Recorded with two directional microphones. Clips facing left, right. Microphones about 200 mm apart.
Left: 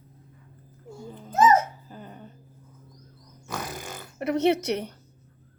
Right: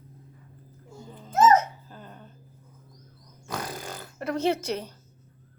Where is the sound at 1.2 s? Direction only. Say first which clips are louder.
Even; 10° left (ahead or behind).